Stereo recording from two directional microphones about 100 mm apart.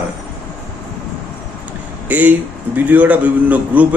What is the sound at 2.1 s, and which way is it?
A man's voice, 15° right (ahead or behind).